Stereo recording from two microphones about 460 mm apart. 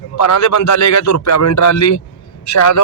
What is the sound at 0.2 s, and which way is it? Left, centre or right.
A man's voice, left.